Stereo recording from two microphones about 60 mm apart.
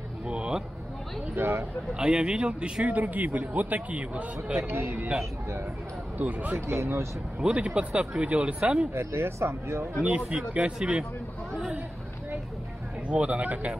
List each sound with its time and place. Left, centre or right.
0.3 s music: centre
1.3 s speech: right
2.0 s speech: centre
4.6 s speech: right
6.1 s speech: right
6.7 s speech: right
7.3 s speech: centre
8.9 s speech: right
10.0 s speech: right
13.1 s speech: right